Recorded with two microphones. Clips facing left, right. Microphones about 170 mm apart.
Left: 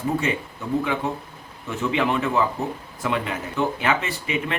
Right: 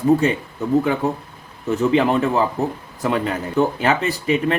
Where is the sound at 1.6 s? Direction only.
35° right (ahead or behind).